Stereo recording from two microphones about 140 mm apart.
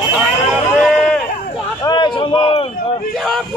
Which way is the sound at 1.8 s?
30° left (ahead or behind).